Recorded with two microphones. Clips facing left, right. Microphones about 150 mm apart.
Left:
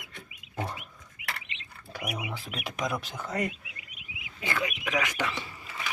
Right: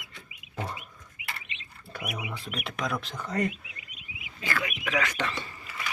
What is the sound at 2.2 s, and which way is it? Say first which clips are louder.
Speech: right 1 dB; centre (ahead or behind).